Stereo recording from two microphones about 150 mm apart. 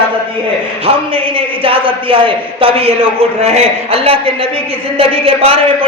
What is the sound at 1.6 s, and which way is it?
A man's voice, 35° right (ahead or behind).